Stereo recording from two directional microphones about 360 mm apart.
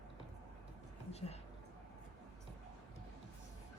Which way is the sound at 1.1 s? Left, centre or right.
Centre.